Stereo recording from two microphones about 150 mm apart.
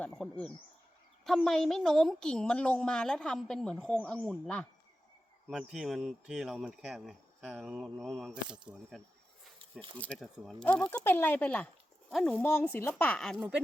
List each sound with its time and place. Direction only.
0.0 s speech: 5° left (ahead or behind)
5.5 s speech: 5° right (ahead or behind)
9.9 s speech: 10° left (ahead or behind)